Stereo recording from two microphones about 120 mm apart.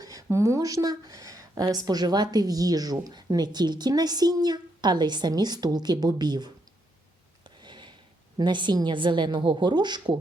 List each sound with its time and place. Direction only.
0.0 s speech: 30° right (ahead or behind)
7.6 s a sound: 40° right (ahead or behind)
8.4 s speech: 40° right (ahead or behind)